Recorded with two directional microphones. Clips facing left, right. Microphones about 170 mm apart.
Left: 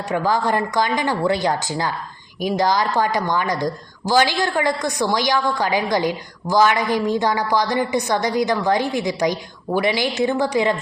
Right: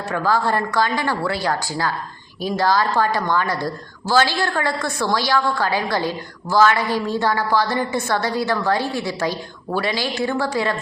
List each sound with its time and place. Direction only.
0.1 s a woman's voice: 20° left (ahead or behind)